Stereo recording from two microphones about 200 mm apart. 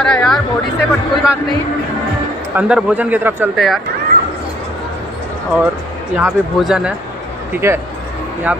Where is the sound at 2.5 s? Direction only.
5° right (ahead or behind).